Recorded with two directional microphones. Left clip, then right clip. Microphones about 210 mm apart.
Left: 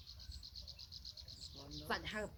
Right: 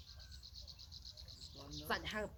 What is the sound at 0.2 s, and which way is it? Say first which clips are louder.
Insect: left 2 dB; 40° left (ahead or behind).